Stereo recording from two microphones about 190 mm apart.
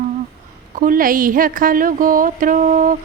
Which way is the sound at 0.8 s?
45° right (ahead or behind).